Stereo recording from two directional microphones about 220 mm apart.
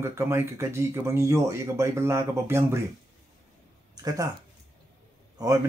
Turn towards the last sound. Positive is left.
turn(degrees=-15)  # may be behind; listen again after turning